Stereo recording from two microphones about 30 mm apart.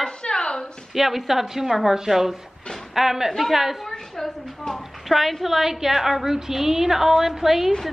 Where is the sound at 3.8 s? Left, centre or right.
Centre.